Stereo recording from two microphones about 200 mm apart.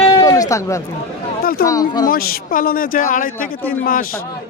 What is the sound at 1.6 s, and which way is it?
Speech, 15° left (ahead or behind).